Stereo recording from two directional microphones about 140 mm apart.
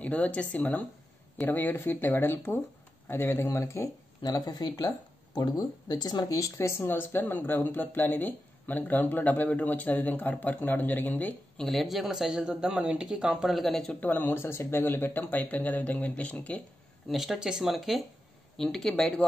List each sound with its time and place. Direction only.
0.0 s speech: 10° left (ahead or behind)
17.1 s speech: centre (ahead or behind)